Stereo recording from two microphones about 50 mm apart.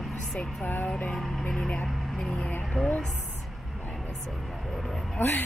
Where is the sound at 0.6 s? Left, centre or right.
Left.